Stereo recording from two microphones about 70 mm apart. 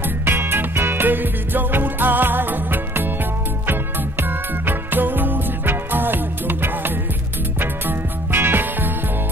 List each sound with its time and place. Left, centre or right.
0.2 s music: right
4.2 s music: right